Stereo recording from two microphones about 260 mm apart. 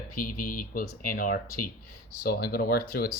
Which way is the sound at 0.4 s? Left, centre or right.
Left.